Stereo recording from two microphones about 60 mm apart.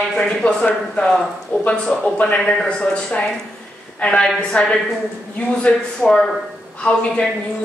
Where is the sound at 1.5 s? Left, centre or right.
Left.